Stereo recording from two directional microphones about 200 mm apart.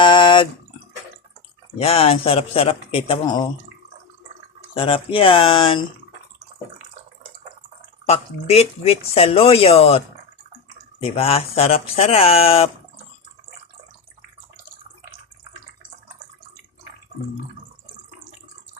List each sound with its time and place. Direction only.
0.0 s drip: 25° left (ahead or behind)
1.8 s speech: 30° left (ahead or behind)
4.7 s speech: 25° left (ahead or behind)
8.0 s speech: 30° left (ahead or behind)
11.0 s speech: 30° left (ahead or behind)